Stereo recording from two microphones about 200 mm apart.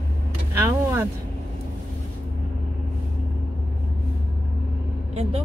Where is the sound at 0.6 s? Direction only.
15° right (ahead or behind).